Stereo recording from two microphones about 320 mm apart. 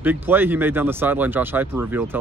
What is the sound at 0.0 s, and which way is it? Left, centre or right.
Speech, centre.